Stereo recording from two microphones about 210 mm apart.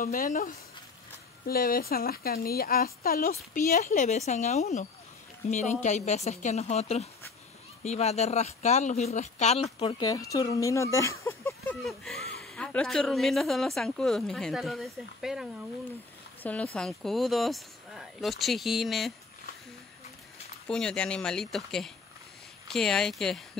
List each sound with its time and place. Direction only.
0.0 s speech: 40° left (ahead or behind); by 11.5 s 15° left (ahead or behind)
11.8 s speech: centre (ahead or behind)
16.7 s speech: centre (ahead or behind)
20.6 s speech: 5° left (ahead or behind)